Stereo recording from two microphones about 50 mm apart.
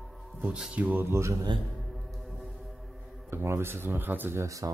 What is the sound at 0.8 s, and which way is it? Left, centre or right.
Speech, right.